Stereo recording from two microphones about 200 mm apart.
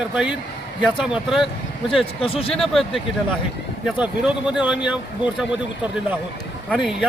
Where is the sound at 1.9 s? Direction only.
30° left (ahead or behind).